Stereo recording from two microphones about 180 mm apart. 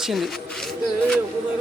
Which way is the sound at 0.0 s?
Centre (ahead or behind).